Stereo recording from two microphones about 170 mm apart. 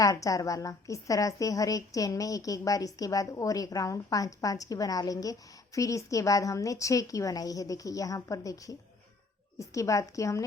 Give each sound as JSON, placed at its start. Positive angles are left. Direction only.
{"t": 0.0, "sound": "a woman's voice", "side_deg": 20}